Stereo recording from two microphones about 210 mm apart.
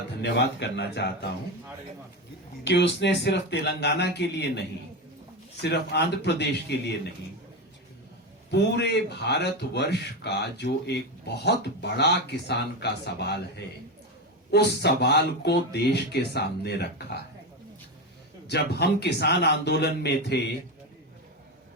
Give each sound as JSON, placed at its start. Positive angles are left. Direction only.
{"t": 0.2, "sound": "a man's voice", "side_deg": 55}
{"t": 2.6, "sound": "a man's voice", "side_deg": 55}
{"t": 5.6, "sound": "a man's voice", "side_deg": 55}
{"t": 8.4, "sound": "a man's voice", "side_deg": 55}
{"t": 18.4, "sound": "a man's voice", "side_deg": 50}